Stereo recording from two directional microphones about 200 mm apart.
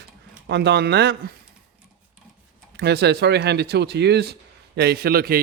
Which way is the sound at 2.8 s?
55° right (ahead or behind).